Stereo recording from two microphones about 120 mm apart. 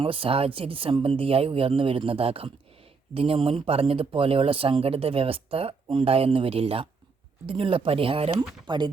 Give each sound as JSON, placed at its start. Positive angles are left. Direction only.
{"t": 0.0, "sound": "speech", "side_deg": -50}
{"t": 8.4, "sound": "speech", "side_deg": -40}